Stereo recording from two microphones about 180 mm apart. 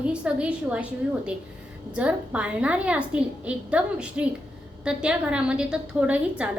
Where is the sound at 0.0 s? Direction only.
5° right (ahead or behind).